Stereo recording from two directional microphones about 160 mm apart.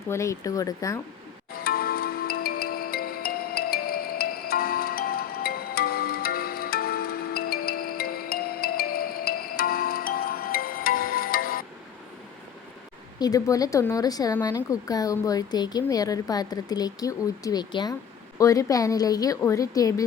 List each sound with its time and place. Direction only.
0.1 s speech: 20° left (ahead or behind)
1.6 s music: 70° left (ahead or behind)
13.1 s speech: 25° left (ahead or behind)